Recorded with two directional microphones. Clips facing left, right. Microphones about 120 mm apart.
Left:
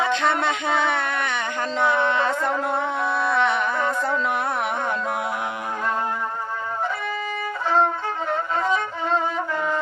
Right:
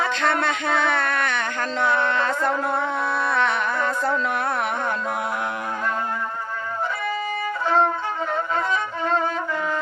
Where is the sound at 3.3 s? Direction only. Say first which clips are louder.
Left 1 dB; 20° left (ahead or behind).